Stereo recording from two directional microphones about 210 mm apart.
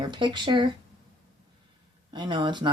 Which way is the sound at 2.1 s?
20° right (ahead or behind).